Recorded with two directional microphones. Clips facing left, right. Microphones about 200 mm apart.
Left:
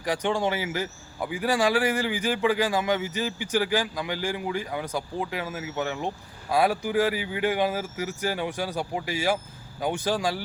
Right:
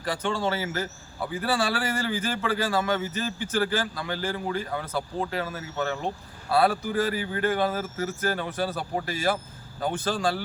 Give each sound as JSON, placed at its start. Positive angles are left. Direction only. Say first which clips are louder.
{"t": 0.0, "sound": "speech", "louder": "left 2 dB", "side_deg": 15}